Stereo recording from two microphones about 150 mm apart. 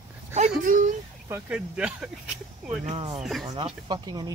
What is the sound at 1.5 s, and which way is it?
Speech, 5° right (ahead or behind).